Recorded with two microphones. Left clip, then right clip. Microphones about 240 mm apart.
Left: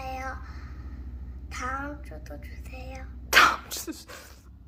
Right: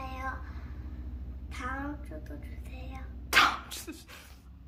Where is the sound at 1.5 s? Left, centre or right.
Centre.